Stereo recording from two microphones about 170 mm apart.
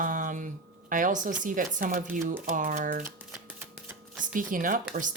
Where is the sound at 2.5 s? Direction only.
50° right (ahead or behind).